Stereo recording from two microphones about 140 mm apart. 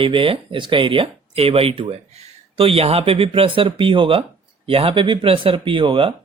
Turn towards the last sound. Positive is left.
turn(degrees=-40)  # may be behind; listen again after turning